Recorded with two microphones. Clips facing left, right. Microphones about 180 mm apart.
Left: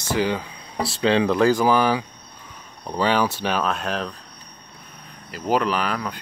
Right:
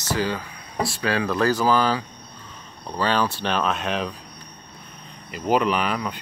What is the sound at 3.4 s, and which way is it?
Speech, 5° left (ahead or behind).